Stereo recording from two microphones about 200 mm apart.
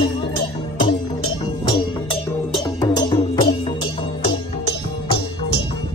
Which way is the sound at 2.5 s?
20° left (ahead or behind).